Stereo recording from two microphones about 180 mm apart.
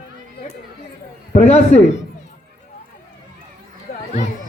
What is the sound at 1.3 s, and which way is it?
Speech, 35° left (ahead or behind).